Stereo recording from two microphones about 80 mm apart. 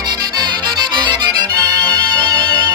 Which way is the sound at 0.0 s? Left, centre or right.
Right.